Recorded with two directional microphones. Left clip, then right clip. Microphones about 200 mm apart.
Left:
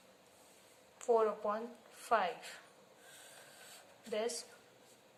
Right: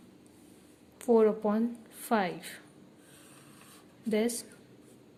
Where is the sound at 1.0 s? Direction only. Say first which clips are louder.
Right 7 dB; 35° right (ahead or behind).